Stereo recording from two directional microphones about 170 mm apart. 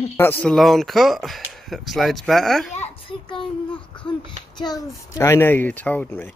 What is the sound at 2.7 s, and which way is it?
Speech, 40° left (ahead or behind).